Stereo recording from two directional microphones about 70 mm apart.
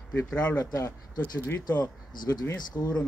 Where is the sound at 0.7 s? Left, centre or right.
Left.